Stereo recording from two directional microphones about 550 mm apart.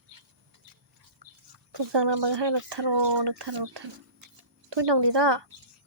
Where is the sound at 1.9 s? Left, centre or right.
Right.